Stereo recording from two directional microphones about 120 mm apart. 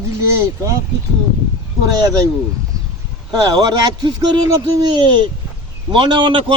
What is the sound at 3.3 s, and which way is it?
A man's voice, 35° right (ahead or behind).